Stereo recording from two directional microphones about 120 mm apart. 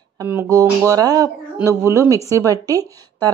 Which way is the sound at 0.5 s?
30° right (ahead or behind).